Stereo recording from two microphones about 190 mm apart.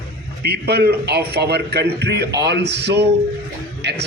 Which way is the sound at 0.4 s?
55° right (ahead or behind).